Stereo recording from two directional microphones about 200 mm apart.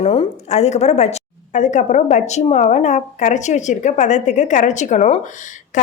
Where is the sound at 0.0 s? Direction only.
30° left (ahead or behind).